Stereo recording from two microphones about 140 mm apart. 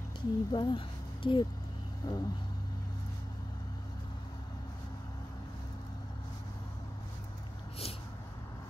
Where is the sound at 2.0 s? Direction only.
25° left (ahead or behind).